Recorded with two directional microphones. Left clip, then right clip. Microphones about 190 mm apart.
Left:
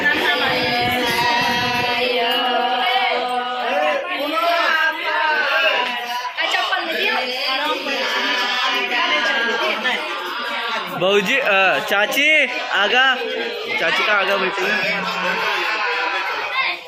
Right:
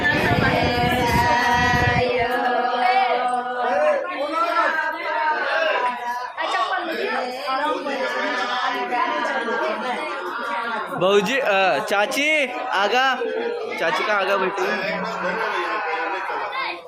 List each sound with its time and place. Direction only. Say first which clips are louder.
11.0 s a man's voice: left 2 dB; centre (ahead or behind)